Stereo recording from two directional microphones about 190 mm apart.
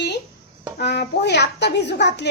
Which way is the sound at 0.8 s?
60° left (ahead or behind).